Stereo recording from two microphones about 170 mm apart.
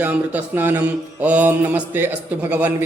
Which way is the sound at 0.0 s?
10° right (ahead or behind).